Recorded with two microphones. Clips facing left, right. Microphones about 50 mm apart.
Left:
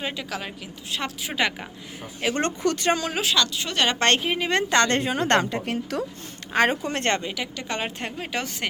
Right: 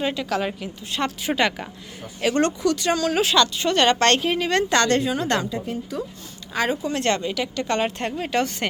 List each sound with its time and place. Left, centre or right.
0.0 s a woman's voice: centre
2.4 s a woman's voice: left
3.2 s a woman's voice: centre
3.9 s a woman's voice: centre; by 5.6 s left
5.6 s a woman's voice: left
6.5 s speech: left
7.2 s speech: centre